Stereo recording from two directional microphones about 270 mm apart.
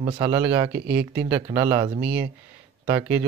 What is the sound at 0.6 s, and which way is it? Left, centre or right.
Speech, centre.